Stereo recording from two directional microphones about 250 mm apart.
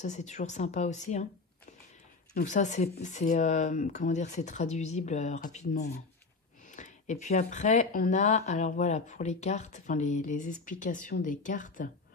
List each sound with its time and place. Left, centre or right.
0.0 s speech: left
2.3 s speech: left